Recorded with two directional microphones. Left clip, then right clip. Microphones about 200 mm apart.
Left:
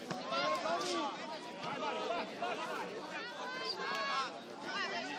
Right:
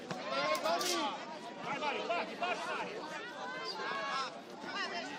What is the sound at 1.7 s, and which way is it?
Chatter, 40° right (ahead or behind).